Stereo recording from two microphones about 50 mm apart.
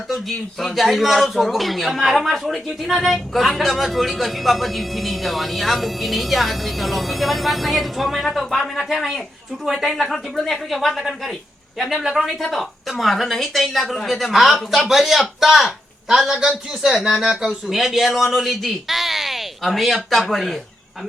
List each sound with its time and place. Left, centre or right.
0.1 s a woman's voice: centre
12.4 s a woman's voice: centre